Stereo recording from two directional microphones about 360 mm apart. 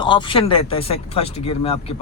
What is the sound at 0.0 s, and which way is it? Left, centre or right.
A man's voice, centre.